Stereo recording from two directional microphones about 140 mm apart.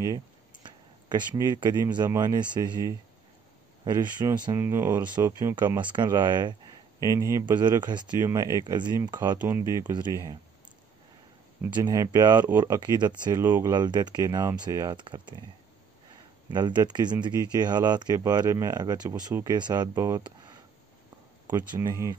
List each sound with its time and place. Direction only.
0.0 s a sound: 25° right (ahead or behind)
1.0 s speech: 30° right (ahead or behind)
5.8 s speech: 35° right (ahead or behind)
11.7 s speech: 30° right (ahead or behind)
13.4 s speech: 20° right (ahead or behind)
16.4 s speech: 30° right (ahead or behind)